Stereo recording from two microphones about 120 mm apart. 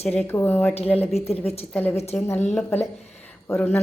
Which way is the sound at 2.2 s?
20° left (ahead or behind).